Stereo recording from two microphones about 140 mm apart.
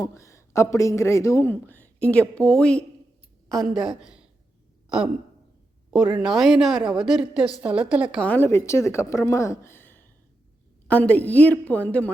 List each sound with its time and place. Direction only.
0.0 s a woman's voice: 25° left (ahead or behind); by 4.3 s 5° right (ahead or behind)
5.9 s a woman's voice: 5° right (ahead or behind)
8.2 s a woman's voice: 15° left (ahead or behind)